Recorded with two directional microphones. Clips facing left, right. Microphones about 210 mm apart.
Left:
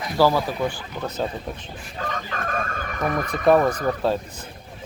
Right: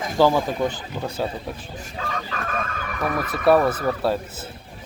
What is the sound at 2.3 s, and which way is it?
Speech, 40° left (ahead or behind).